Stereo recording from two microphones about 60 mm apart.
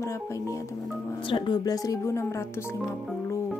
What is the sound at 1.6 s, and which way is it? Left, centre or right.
Speech, left.